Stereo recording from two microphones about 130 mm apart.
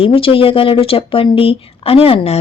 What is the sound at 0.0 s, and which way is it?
A woman's voice, 45° left (ahead or behind).